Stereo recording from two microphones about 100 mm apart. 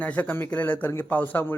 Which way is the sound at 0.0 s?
15° left (ahead or behind).